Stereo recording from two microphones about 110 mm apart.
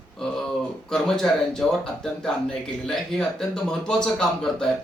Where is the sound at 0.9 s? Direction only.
5° left (ahead or behind).